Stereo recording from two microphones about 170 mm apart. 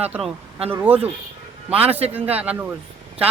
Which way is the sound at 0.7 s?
10° right (ahead or behind).